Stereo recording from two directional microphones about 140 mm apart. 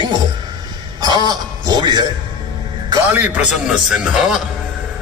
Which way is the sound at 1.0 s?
30° right (ahead or behind).